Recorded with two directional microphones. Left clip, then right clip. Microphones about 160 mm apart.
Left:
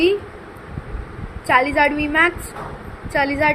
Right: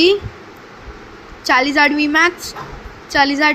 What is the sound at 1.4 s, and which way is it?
A woman's voice, 55° right (ahead or behind).